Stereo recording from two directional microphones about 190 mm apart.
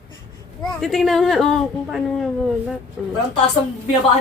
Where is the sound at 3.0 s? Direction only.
Centre (ahead or behind).